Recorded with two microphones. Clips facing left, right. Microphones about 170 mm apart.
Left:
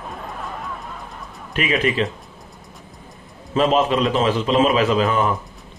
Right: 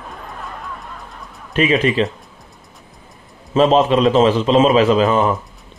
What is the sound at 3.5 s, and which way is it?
A man's voice, 25° right (ahead or behind).